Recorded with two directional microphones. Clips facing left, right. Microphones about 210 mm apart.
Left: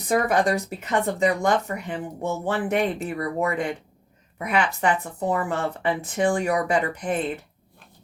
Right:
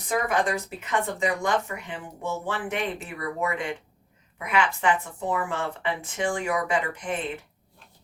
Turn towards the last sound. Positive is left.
turn(degrees=35)  # may be behind; listen again after turning